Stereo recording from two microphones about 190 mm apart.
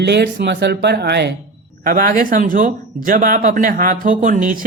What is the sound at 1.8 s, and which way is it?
Speech, 50° right (ahead or behind).